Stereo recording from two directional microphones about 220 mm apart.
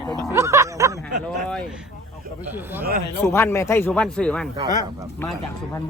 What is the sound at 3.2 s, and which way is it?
Speech, 10° left (ahead or behind).